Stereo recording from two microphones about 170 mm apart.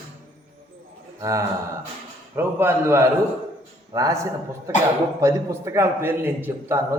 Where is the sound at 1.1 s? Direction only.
20° right (ahead or behind).